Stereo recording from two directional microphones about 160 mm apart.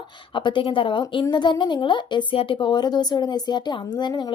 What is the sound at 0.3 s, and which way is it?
A woman's voice, 30° left (ahead or behind).